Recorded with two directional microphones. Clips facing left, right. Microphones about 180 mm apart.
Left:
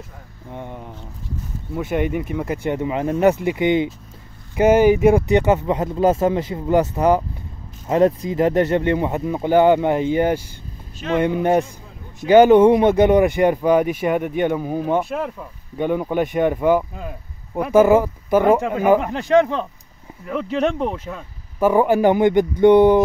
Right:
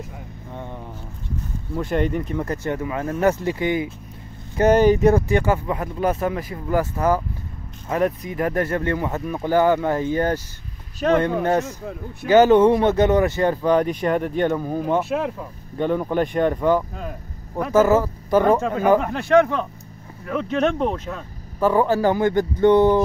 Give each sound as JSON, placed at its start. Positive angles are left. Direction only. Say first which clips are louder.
{"t": 0.5, "sound": "a sound", "louder": "left 2 dB", "side_deg": 15}
{"t": 1.7, "sound": "speech", "louder": "left 1 dB", "side_deg": 5}
{"t": 4.6, "sound": "speech", "louder": "left 2 dB", "side_deg": 10}
{"t": 11.6, "sound": "a man's voice", "louder": "right 9 dB", "side_deg": -65}
{"t": 12.3, "sound": "speech", "louder": "left 3 dB", "side_deg": 15}
{"t": 15.0, "sound": "speech", "louder": "even", "side_deg": -5}
{"t": 15.8, "sound": "speech", "louder": "left 1 dB", "side_deg": 10}
{"t": 20.2, "sound": "speech", "louder": "even", "side_deg": 5}